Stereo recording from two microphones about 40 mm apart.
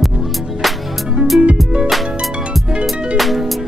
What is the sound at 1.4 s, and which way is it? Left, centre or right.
Music, right.